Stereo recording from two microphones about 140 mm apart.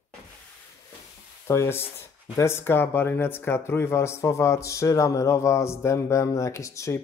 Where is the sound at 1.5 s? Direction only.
20° left (ahead or behind).